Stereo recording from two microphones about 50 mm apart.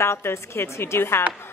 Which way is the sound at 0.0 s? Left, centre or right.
Left.